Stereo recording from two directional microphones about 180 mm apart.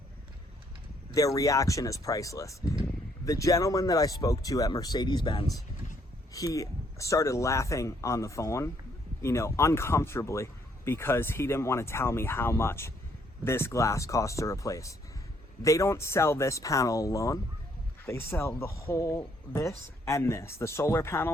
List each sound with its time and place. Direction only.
1.1 s speech: 20° left (ahead or behind)